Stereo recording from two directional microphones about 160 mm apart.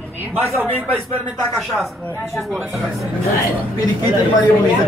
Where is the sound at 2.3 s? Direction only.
Centre (ahead or behind).